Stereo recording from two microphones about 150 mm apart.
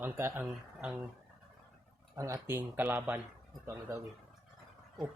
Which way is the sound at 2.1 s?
20° right (ahead or behind).